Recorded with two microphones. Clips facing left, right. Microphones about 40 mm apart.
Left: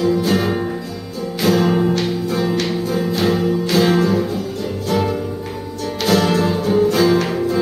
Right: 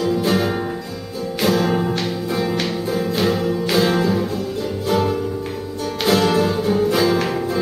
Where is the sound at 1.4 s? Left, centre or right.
Centre.